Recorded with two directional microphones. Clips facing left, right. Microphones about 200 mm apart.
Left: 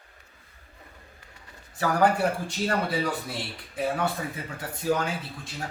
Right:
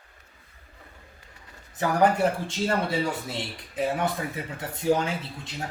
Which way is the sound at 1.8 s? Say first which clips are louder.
Right 1 dB; 20° right (ahead or behind).